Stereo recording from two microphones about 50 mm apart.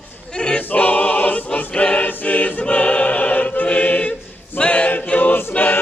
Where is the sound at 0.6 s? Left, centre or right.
Left.